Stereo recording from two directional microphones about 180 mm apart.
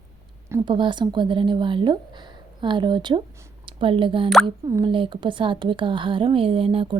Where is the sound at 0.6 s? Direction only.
25° right (ahead or behind).